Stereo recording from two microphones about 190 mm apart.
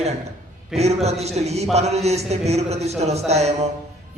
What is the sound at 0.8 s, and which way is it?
Speech, 35° right (ahead or behind).